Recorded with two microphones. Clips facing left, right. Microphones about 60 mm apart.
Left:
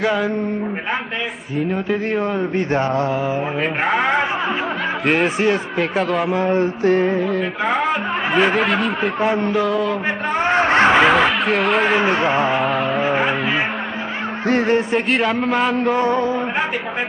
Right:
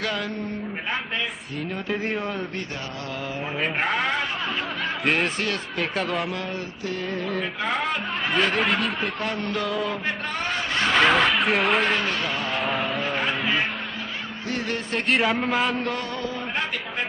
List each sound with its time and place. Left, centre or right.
0.0 s a man's voice: centre
1.9 s a man's voice: centre
2.5 s speech: left
3.8 s a man's voice: centre
6.5 s speech: left
7.2 s speech: centre
9.2 s speech: centre
9.5 s a man's voice: centre
10.3 s a sound: left
11.0 s speech: centre
11.9 s speech: left
12.5 s a man's voice: centre
14.5 s music: left
15.0 s a man's voice: centre